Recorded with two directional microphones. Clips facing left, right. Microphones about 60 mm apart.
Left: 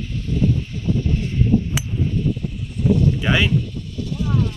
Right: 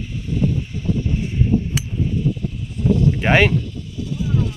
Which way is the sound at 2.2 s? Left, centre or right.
Centre.